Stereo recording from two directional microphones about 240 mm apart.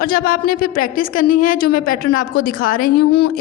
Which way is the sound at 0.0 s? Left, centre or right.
Left.